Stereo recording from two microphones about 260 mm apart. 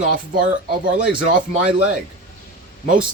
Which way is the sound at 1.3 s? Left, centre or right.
Right.